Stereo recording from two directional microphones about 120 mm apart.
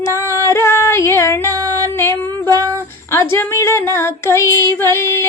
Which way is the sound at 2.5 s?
30° right (ahead or behind).